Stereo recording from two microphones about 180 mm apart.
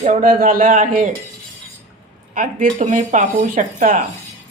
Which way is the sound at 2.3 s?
45° right (ahead or behind).